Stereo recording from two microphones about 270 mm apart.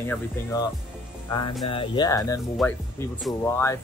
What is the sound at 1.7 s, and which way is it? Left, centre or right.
Speech, centre.